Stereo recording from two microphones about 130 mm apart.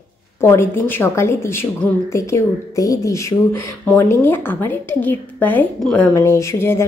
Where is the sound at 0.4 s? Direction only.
20° left (ahead or behind).